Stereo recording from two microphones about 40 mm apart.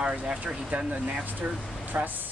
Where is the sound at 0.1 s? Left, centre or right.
Right.